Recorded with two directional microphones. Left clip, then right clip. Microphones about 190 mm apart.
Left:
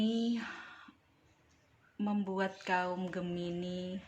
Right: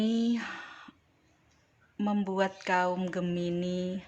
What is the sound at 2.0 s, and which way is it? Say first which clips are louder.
Speech: right 6 dB; 25° right (ahead or behind).